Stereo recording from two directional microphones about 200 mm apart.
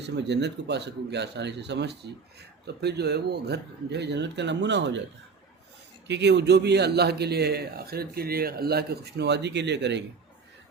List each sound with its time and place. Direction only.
0.0 s speech: 60° right (ahead or behind)
6.1 s speech: 60° right (ahead or behind)